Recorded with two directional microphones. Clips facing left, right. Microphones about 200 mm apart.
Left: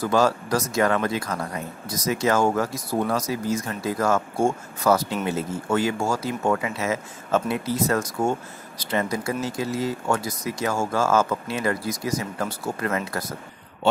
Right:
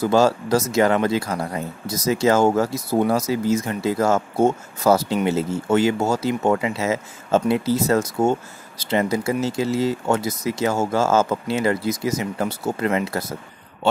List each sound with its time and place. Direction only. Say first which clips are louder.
0.0 s speech: right 4 dB; 25° right (ahead or behind)